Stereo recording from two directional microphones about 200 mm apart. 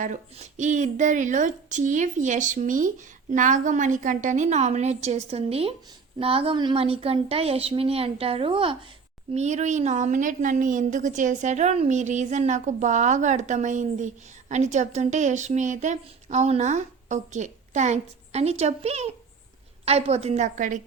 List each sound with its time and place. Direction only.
0.0 s a woman's voice: 35° right (ahead or behind)